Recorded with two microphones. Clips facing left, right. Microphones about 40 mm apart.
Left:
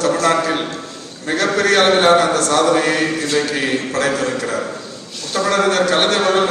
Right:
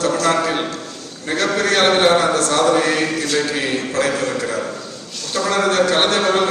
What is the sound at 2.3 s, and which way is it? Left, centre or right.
Speech, right.